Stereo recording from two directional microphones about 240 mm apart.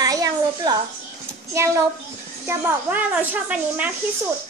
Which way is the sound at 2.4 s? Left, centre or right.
Centre.